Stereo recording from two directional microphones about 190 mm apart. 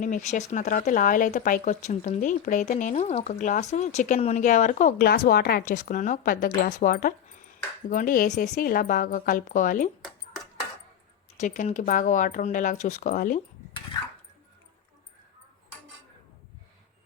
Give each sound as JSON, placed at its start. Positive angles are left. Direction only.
{"t": 0.0, "sound": "speech", "side_deg": 40}
{"t": 11.3, "sound": "speech", "side_deg": 40}